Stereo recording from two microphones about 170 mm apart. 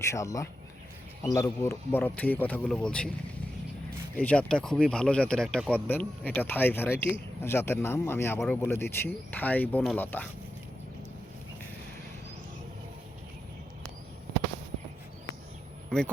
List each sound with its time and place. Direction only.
0.1 s speech: 20° left (ahead or behind)
4.1 s speech: 5° left (ahead or behind)